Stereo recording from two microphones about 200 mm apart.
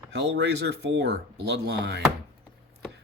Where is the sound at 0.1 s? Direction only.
60° right (ahead or behind).